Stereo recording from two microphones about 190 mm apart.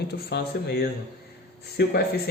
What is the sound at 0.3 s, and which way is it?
Speech, 60° left (ahead or behind).